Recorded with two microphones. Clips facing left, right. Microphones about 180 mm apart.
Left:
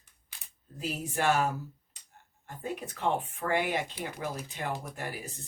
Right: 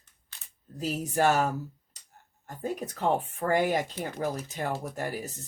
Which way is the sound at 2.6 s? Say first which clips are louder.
Right 3 dB; 40° right (ahead or behind).